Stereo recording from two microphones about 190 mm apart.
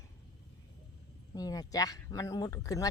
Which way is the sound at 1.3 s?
20° left (ahead or behind).